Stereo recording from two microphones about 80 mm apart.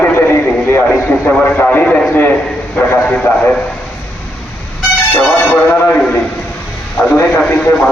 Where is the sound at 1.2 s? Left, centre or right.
Left.